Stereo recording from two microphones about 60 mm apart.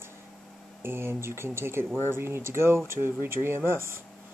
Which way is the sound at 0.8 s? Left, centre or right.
Right.